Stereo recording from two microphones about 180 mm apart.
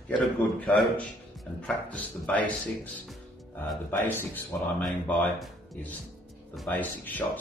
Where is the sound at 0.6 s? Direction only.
5° left (ahead or behind).